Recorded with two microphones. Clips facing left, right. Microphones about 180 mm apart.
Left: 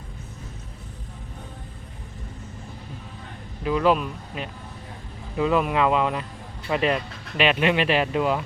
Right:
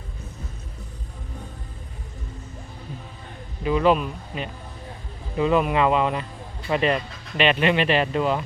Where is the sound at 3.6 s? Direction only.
Centre (ahead or behind).